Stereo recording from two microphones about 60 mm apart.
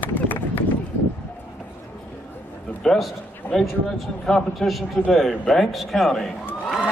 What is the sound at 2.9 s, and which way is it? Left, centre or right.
A man's voice, centre.